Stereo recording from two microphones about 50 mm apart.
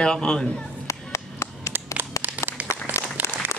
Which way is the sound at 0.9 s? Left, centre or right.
Left.